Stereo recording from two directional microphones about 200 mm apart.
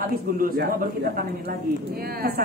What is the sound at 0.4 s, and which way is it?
Speech, 45° right (ahead or behind).